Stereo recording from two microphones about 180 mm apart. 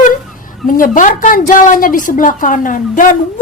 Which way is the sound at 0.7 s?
50° left (ahead or behind).